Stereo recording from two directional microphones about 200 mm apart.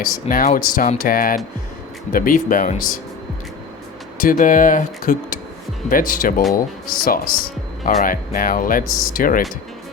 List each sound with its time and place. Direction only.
0.0 s speech: 45° left (ahead or behind)
4.2 s speech: 45° left (ahead or behind)